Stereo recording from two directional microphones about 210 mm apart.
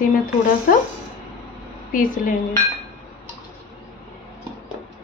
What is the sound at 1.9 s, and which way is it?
Speech, 40° left (ahead or behind).